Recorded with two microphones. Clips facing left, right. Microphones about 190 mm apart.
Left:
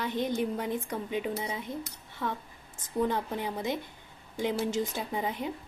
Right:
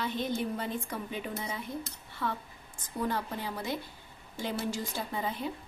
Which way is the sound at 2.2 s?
20° left (ahead or behind).